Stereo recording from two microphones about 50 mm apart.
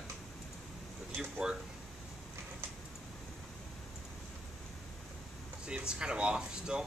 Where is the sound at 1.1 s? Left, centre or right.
Centre.